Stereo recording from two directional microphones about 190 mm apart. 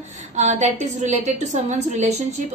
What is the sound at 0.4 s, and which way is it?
A woman's voice, 40° right (ahead or behind).